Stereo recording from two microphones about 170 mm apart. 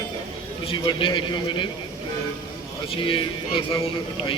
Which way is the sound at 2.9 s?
30° left (ahead or behind).